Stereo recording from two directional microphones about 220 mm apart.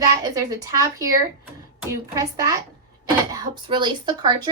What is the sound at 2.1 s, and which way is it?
A woman's voice, 15° right (ahead or behind).